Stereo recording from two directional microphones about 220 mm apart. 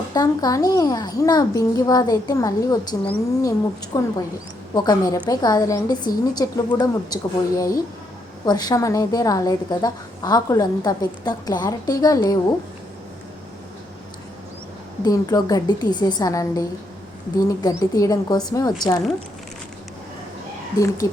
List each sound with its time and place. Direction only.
0.1 s a woman's voice: 15° left (ahead or behind)
15.0 s a woman's voice: 15° left (ahead or behind)
20.7 s a woman's voice: 15° left (ahead or behind)